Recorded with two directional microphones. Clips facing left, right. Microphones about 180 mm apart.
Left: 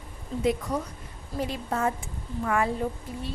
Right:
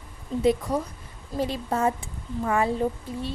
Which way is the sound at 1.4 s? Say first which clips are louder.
Right 3 dB; 25° right (ahead or behind).